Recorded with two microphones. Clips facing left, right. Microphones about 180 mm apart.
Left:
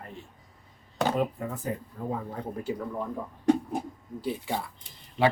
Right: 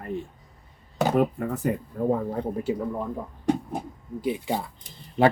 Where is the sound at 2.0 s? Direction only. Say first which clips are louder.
Right 10 dB; 55° right (ahead or behind).